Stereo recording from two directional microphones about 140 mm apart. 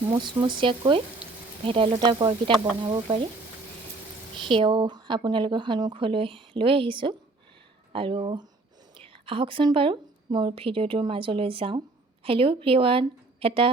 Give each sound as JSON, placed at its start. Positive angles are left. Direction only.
{"t": 0.1, "sound": "speech", "side_deg": -35}
{"t": 2.0, "sound": "speech", "side_deg": -30}
{"t": 4.4, "sound": "speech", "side_deg": -35}